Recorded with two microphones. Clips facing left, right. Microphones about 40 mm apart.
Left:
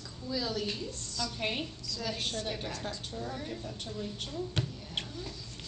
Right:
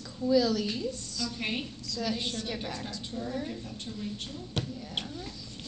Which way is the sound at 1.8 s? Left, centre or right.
Right.